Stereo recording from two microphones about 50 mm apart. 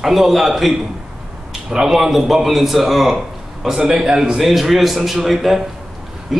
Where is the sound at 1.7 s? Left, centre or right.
Centre.